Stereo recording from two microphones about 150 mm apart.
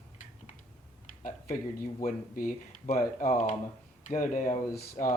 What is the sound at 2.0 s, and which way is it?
Speech, 65° left (ahead or behind).